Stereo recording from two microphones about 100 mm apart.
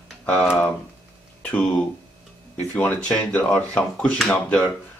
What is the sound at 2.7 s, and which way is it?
A man's voice, 15° left (ahead or behind).